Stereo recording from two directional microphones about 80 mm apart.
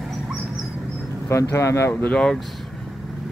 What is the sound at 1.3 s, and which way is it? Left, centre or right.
Speech, left.